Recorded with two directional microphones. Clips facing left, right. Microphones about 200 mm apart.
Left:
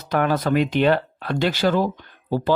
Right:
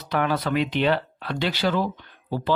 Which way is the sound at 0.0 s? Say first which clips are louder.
Left 3 dB; 45° left (ahead or behind).